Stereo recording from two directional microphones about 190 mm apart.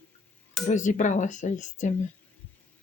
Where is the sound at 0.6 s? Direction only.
40° left (ahead or behind).